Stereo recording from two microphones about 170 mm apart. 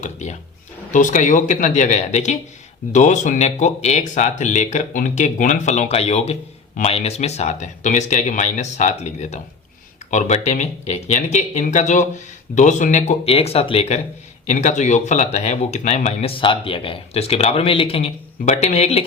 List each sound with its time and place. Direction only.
0.0 s speech: 45° left (ahead or behind)